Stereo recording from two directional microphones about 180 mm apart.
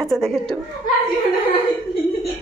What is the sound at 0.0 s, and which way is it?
Speech, centre (ahead or behind).